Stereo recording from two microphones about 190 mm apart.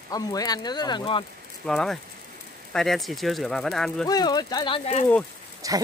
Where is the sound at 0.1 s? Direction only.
20° left (ahead or behind).